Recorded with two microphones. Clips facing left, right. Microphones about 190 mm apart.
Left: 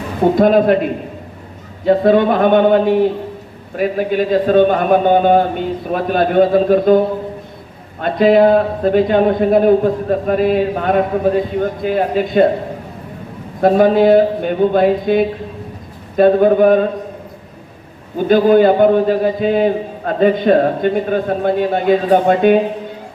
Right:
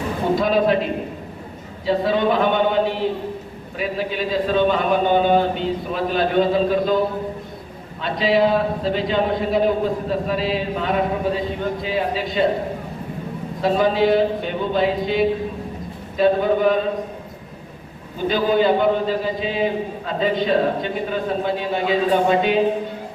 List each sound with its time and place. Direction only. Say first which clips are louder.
0.3 s a man's voice: left 7 dB; 50° left (ahead or behind)
1.8 s a man's voice: left 8 dB; 55° left (ahead or behind)
8.0 s a man's voice: left 8 dB; 55° left (ahead or behind)
13.6 s a man's voice: left 7 dB; 50° left (ahead or behind)
18.3 s a man's voice: left 8 dB; 55° left (ahead or behind)